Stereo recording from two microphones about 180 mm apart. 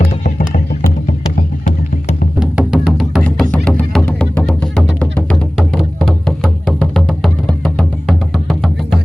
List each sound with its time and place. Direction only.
0.3 s music: 50° left (ahead or behind)
2.4 s music: 5° right (ahead or behind)